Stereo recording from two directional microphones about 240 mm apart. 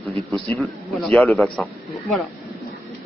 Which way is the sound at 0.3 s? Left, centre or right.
Centre.